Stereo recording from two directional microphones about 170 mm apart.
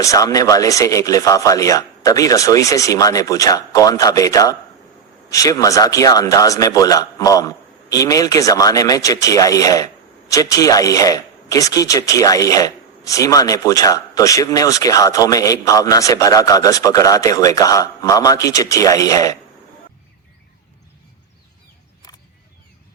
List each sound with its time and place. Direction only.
0.0 s speech: 20° left (ahead or behind)